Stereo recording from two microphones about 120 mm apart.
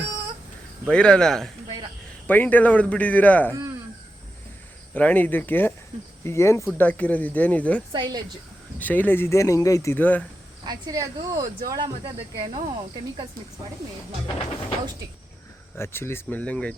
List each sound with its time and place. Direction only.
0.9 s speech: 10° left (ahead or behind)
2.2 s speech: 15° left (ahead or behind)
4.9 s speech: 15° left (ahead or behind)
7.9 s speech: 40° right (ahead or behind)
8.8 s speech: 15° left (ahead or behind)
10.7 s speech: 30° right (ahead or behind)
15.8 s speech: 20° left (ahead or behind)